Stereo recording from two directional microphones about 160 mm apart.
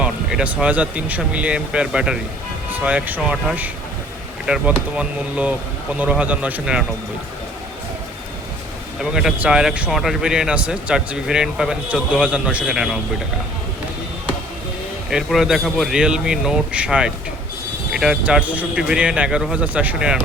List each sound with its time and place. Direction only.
0.0 s speech: 5° right (ahead or behind)
9.0 s speech: 5° right (ahead or behind)
15.1 s speech: centre (ahead or behind)